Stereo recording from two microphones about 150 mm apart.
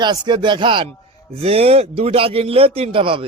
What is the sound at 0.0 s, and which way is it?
Speech, 30° right (ahead or behind).